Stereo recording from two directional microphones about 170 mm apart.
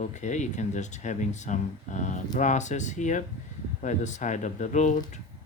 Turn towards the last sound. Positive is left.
turn(degrees=45)  # may be behind; listen again after turning